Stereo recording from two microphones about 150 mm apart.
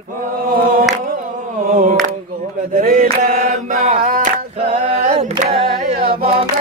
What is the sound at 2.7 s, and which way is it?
Mantra, 70° right (ahead or behind).